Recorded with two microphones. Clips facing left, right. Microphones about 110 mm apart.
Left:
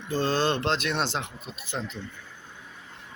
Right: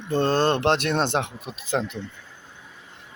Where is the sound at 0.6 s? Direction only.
65° right (ahead or behind).